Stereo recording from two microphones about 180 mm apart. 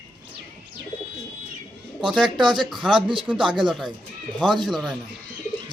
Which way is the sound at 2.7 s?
25° right (ahead or behind).